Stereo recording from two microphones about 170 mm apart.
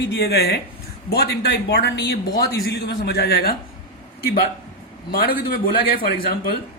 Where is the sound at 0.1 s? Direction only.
75° left (ahead or behind).